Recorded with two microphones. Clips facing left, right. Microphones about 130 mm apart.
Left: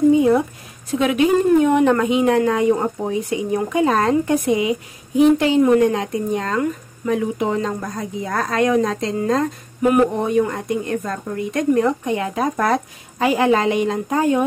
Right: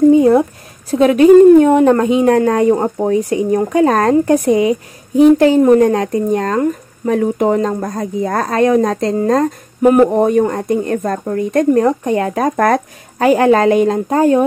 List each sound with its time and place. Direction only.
0.8 s a woman's voice: 40° right (ahead or behind)